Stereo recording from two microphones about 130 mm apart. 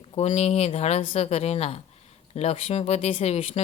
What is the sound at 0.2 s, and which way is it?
Speech, 55° left (ahead or behind).